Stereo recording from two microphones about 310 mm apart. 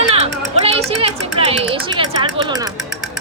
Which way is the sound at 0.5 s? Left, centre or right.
Centre.